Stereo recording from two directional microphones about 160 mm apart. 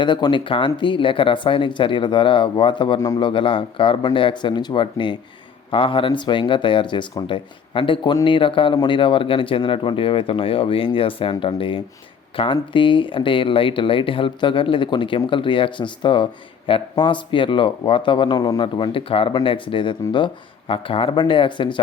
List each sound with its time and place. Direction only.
0.0 s speech: 30° left (ahead or behind)